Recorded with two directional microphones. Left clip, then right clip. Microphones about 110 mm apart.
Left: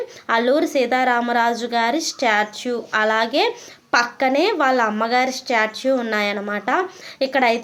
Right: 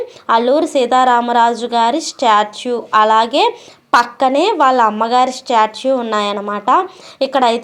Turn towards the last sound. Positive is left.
turn(degrees=-20)  # may be behind; listen again after turning